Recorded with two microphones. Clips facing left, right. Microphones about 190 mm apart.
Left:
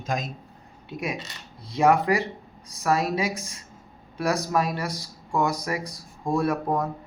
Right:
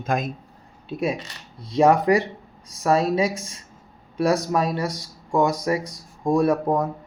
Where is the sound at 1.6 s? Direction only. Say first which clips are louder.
Right 3 dB; 25° right (ahead or behind).